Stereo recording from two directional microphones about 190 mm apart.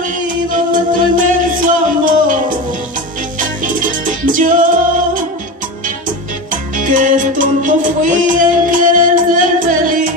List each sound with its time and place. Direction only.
0.5 s music: 45° right (ahead or behind)
6.5 s music: 45° right (ahead or behind)